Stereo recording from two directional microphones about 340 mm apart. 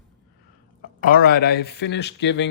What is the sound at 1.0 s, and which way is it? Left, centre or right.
Speech, left.